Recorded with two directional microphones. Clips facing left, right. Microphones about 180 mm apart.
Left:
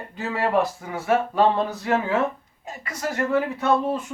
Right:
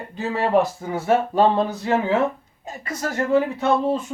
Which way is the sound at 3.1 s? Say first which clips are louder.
Right 4 dB; 25° right (ahead or behind).